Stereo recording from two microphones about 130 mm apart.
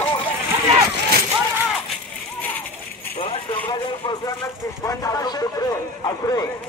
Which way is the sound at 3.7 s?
35° left (ahead or behind).